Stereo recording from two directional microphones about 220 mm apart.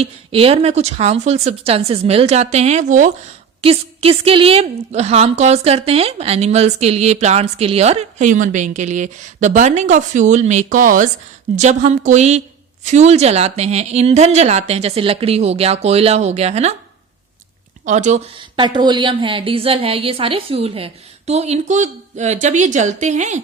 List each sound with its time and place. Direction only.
0.0 s a woman's voice: 25° right (ahead or behind)
17.8 s a woman's voice: 35° right (ahead or behind)